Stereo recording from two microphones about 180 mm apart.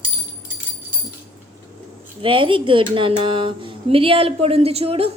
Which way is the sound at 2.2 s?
30° right (ahead or behind).